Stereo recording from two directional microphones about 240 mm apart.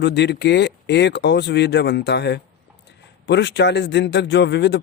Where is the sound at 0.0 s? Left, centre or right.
Left.